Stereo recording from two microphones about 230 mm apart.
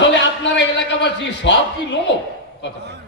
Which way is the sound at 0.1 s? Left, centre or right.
Left.